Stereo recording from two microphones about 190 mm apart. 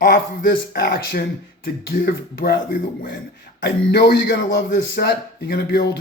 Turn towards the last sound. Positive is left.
turn(degrees=55)  # may be behind; listen again after turning